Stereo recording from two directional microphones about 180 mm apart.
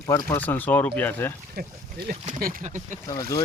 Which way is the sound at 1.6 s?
60° right (ahead or behind).